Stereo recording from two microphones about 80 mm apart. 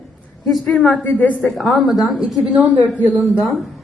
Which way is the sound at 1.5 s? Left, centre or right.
Centre.